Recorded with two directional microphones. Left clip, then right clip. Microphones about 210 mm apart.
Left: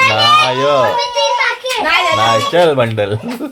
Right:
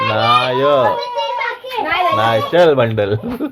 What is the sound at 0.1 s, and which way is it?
Speech, 5° left (ahead or behind).